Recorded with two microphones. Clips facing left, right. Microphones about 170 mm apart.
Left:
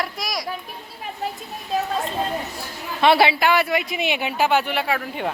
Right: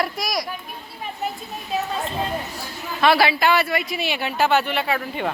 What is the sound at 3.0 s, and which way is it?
A woman's voice, 20° left (ahead or behind).